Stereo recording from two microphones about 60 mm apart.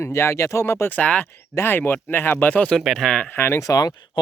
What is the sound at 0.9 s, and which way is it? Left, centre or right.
Speech, left.